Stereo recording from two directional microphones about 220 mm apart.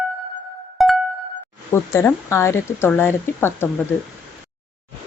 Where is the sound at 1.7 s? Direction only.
10° left (ahead or behind).